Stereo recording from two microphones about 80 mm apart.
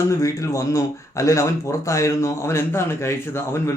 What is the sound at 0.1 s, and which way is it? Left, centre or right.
A man's voice, left.